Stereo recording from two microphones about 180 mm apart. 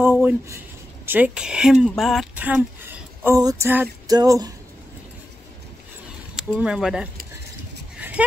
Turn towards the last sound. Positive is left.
turn(degrees=-5)  # may be behind; listen again after turning